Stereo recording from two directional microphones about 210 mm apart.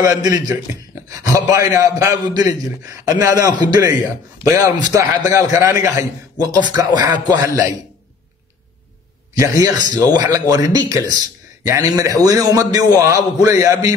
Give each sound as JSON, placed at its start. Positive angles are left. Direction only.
{"t": 0.0, "sound": "a man's voice", "side_deg": -15}
{"t": 9.3, "sound": "a man's voice", "side_deg": -15}